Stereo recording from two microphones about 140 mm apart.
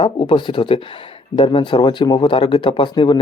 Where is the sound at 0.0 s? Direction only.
35° left (ahead or behind).